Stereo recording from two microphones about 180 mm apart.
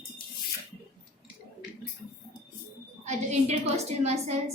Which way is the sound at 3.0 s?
40° right (ahead or behind).